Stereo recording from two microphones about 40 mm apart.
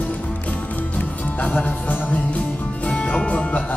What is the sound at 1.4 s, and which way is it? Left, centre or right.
Music, left.